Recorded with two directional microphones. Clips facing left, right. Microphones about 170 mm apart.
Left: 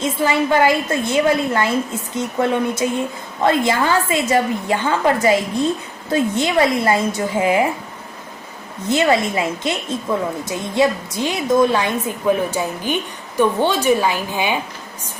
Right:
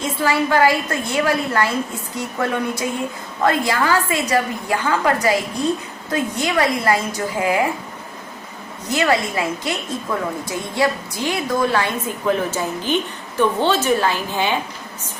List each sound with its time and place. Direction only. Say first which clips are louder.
0.0 s a woman's voice: left 2 dB; 20° left (ahead or behind)
8.9 s a woman's voice: left 3 dB; 20° left (ahead or behind)